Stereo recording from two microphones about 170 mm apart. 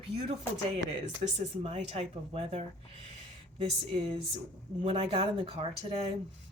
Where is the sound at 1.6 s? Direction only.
40° right (ahead or behind).